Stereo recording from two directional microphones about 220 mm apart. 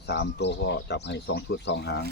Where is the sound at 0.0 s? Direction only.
50° left (ahead or behind).